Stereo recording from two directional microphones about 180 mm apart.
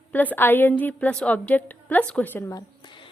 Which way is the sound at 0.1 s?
10° left (ahead or behind).